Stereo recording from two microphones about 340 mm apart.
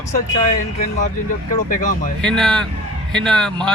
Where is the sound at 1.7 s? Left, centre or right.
Left.